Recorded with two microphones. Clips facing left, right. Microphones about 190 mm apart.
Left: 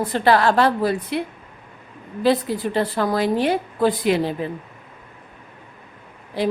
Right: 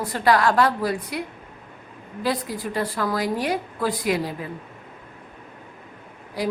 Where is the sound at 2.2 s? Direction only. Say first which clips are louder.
Left 7 dB; 25° left (ahead or behind).